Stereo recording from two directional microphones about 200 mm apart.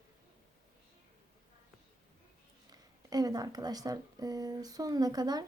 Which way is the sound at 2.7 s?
20° right (ahead or behind).